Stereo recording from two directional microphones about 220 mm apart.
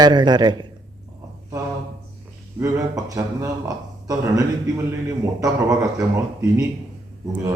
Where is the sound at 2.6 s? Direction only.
15° right (ahead or behind).